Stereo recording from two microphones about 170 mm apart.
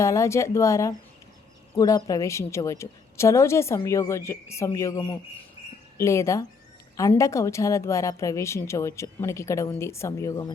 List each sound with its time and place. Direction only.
0.0 s a woman's voice: 15° left (ahead or behind)